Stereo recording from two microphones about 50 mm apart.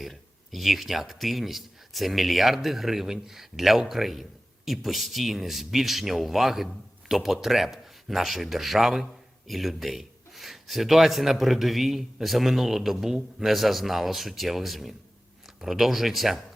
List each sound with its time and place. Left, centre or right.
0.0 s speech: centre